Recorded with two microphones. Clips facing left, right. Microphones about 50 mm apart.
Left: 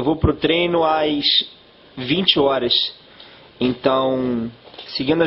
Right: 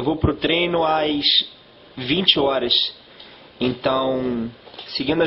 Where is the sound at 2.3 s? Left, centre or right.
Centre.